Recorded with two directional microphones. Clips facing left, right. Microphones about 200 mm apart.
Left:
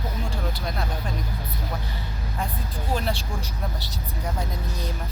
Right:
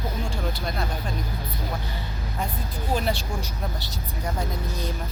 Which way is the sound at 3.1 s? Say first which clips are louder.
Right 1 dB; 35° left (ahead or behind).